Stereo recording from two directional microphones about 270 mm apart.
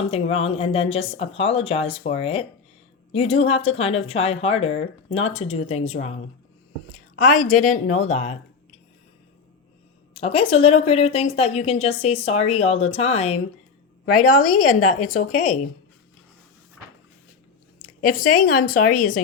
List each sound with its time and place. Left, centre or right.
0.1 s a woman's voice: left
10.2 s a woman's voice: left
14.0 s a woman's voice: left
14.3 s a woman's voice: left
17.7 s speech: left